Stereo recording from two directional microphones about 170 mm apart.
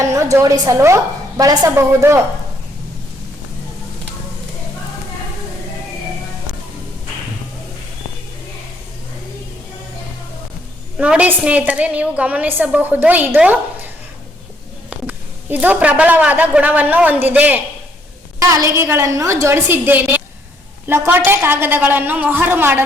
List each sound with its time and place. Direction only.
0.0 s a woman's voice: 20° right (ahead or behind)
10.9 s a woman's voice: 5° right (ahead or behind)